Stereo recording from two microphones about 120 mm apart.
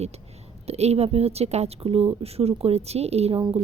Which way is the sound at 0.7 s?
60° right (ahead or behind).